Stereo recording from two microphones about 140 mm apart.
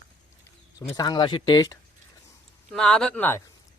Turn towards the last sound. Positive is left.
turn(degrees=15)  # may be behind; listen again after turning